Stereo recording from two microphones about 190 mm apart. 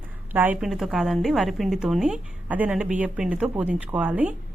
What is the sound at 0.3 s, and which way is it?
A woman's voice, 10° right (ahead or behind).